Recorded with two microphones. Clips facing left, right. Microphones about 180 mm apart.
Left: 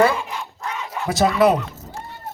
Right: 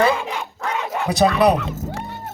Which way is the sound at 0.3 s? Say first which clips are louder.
Right 4 dB; 80° right.